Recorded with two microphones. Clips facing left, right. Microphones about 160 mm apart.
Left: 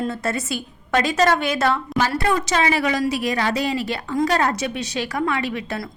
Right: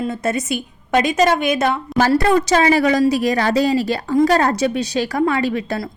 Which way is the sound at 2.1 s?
35° right (ahead or behind).